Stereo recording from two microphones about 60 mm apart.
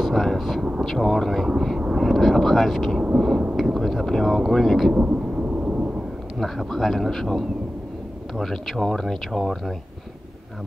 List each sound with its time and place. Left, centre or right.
0.0 s speech: centre
2.0 s vehicle: centre
3.2 s speech: centre
4.9 s thunder: centre
6.3 s speech: centre